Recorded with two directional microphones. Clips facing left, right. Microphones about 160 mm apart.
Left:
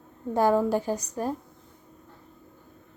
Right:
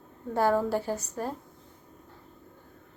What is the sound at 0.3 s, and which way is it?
Speech, 15° left (ahead or behind).